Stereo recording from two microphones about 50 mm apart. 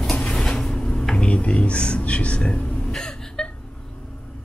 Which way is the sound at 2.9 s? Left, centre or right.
Centre.